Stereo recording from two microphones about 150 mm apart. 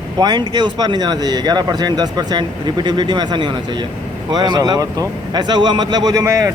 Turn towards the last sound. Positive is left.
turn(degrees=-20)  # may be behind; listen again after turning